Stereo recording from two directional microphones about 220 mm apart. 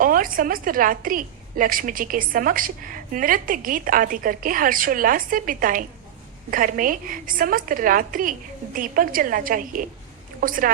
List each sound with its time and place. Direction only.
0.0 s a woman's voice: 40° right (ahead or behind)